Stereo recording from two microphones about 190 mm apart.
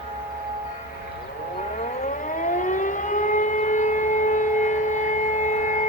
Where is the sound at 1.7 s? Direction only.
40° left (ahead or behind).